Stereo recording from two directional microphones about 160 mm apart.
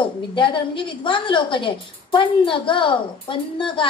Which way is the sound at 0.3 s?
30° left (ahead or behind).